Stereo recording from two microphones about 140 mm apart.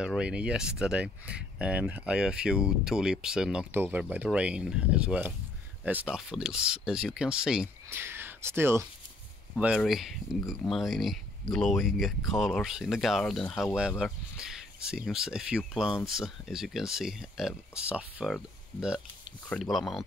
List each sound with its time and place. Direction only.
0.0 s speech: 5° right (ahead or behind)
3.7 s speech: 15° right (ahead or behind)
7.9 s speech: 15° right (ahead or behind)
9.8 s speech: centre (ahead or behind)
13.7 s speech: 5° right (ahead or behind)